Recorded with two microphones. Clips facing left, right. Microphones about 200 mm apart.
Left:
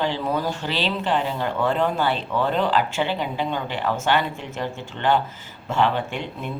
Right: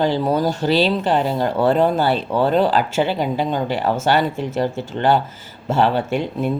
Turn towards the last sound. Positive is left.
turn(degrees=-40)  # may be behind; listen again after turning